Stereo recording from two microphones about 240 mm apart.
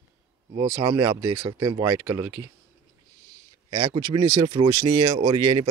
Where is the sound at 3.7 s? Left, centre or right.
Centre.